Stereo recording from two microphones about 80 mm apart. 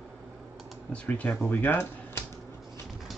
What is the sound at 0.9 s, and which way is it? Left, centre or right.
Speech, centre.